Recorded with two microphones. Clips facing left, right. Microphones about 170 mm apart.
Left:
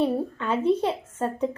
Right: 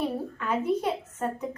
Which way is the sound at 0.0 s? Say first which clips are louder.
Left 5 dB; 25° left (ahead or behind).